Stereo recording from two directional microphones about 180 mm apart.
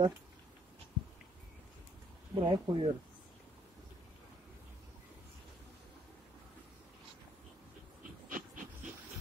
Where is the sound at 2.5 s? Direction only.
30° right (ahead or behind).